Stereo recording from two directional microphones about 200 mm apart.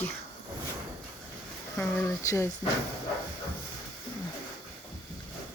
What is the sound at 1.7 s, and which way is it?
Speech, 10° left (ahead or behind).